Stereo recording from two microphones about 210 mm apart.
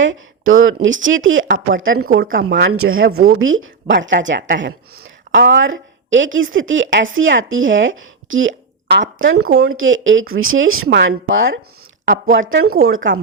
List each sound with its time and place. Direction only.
0.0 s a woman's voice: 65° right (ahead or behind)
2.0 s speech: 45° right (ahead or behind)
2.3 s speech: 65° right (ahead or behind)
3.2 s speech: 50° right (ahead or behind)
3.4 s a woman's voice: 70° right (ahead or behind)
10.8 s a woman's voice: 60° right (ahead or behind)
12.0 s speech: 55° right (ahead or behind); by 12.8 s 80° right
13.0 s speech: 65° right (ahead or behind)